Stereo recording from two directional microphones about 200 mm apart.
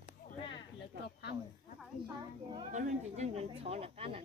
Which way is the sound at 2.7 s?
35° right (ahead or behind).